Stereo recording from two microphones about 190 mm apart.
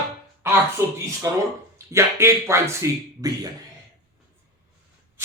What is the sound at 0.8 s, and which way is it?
Speech, 15° right (ahead or behind).